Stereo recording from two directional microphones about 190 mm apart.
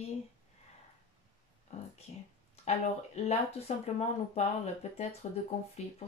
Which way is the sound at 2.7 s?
35° left (ahead or behind).